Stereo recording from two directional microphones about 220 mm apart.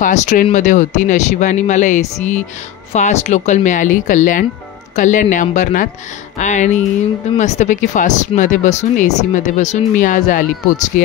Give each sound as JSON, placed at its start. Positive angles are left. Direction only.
{"t": 0.0, "sound": "speech", "side_deg": 35}